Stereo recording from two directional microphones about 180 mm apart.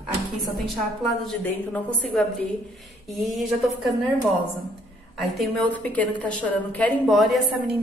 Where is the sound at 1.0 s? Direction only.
5° left (ahead or behind).